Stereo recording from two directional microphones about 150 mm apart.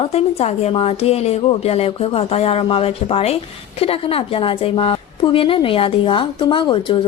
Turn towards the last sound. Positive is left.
turn(degrees=35)  # may be behind; listen again after turning